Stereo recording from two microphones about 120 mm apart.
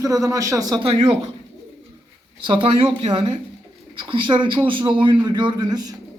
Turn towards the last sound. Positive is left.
turn(degrees=-30)  # may be behind; listen again after turning